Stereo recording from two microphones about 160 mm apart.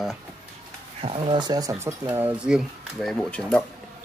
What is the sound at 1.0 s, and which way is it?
Speech, 30° right (ahead or behind).